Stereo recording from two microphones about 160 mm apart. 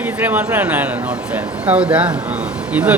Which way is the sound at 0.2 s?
10° right (ahead or behind).